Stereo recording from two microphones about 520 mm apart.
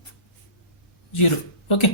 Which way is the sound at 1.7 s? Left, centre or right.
Left.